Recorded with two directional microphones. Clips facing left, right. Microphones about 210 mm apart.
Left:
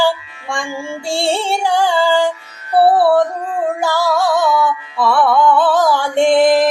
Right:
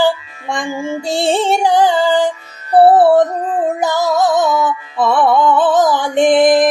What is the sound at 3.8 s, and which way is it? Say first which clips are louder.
Music: right 1 dB; 20° right (ahead or behind).